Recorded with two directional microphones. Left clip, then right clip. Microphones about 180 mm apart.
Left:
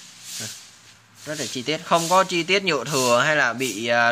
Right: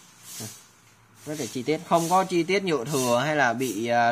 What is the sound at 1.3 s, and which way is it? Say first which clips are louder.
Speech: left 2 dB; centre (ahead or behind).